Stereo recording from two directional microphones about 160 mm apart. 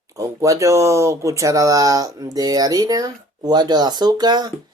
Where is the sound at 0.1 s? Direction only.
20° right (ahead or behind).